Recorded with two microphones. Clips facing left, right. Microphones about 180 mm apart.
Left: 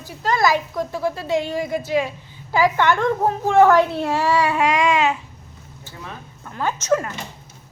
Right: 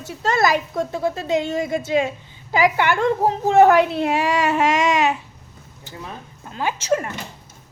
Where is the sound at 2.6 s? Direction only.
15° right (ahead or behind).